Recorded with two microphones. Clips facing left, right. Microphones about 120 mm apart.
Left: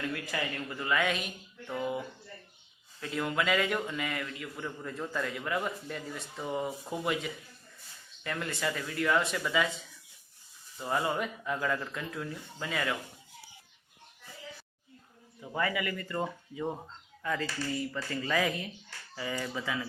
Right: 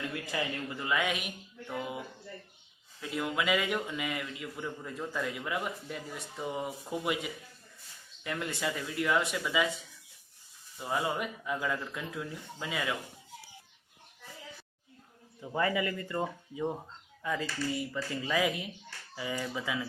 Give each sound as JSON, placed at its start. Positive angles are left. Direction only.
{"t": 0.1, "sound": "a man's voice", "side_deg": -20}
{"t": 3.0, "sound": "a man's voice", "side_deg": -10}
{"t": 10.8, "sound": "a man's voice", "side_deg": -5}
{"t": 15.4, "sound": "a man's voice", "side_deg": -25}